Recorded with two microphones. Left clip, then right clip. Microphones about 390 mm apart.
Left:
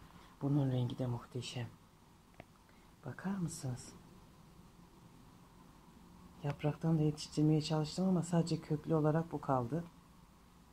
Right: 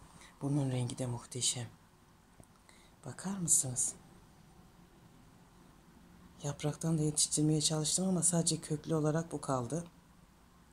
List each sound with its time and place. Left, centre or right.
0.4 s speech: centre
3.0 s speech: centre
6.4 s speech: centre